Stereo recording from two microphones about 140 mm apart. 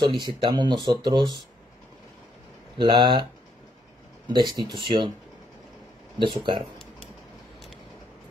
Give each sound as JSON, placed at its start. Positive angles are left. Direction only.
{"t": 0.0, "sound": "speech", "side_deg": -35}
{"t": 2.8, "sound": "speech", "side_deg": -35}
{"t": 4.3, "sound": "speech", "side_deg": -35}
{"t": 6.1, "sound": "speech", "side_deg": -35}